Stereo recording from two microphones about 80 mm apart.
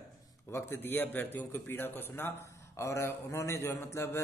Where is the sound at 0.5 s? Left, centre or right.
Left.